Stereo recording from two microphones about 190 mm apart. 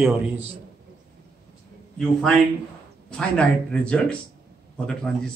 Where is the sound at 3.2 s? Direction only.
5° left (ahead or behind).